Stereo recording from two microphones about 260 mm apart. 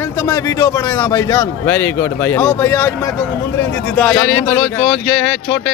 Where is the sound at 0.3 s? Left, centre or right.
Centre.